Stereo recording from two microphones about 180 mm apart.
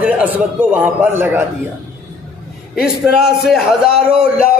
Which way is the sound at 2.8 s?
5° right (ahead or behind).